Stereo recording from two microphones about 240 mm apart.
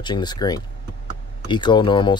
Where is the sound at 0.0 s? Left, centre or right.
Centre.